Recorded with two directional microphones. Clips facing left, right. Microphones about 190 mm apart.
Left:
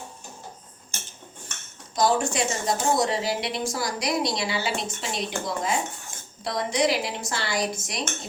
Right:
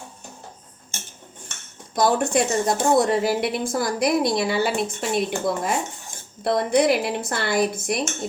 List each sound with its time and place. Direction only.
2.0 s speech: 55° right (ahead or behind)